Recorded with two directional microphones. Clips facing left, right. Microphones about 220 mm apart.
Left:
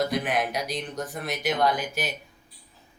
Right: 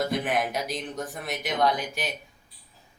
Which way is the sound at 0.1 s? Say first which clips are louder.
Even; centre (ahead or behind).